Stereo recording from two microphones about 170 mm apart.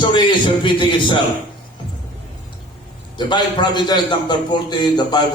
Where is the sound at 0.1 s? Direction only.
30° left (ahead or behind).